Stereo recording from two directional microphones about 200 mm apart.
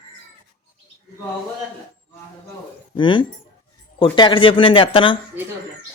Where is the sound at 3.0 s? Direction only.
25° left (ahead or behind).